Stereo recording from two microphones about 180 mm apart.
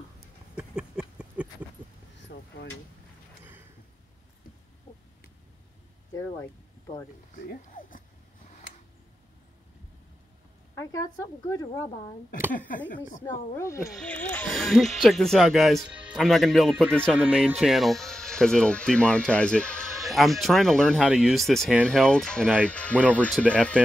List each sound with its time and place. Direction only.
0.6 s a sound: 5° right (ahead or behind)
2.1 s vehicle: 80° left
7.4 s speech: 50° left (ahead or behind)
10.8 s speech: 20° left (ahead or behind)
12.5 s speech: 50° left (ahead or behind)
13.2 s speech: 15° left (ahead or behind)